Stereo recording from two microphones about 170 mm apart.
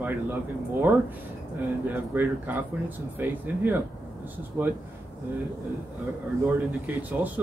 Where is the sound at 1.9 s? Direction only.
10° right (ahead or behind).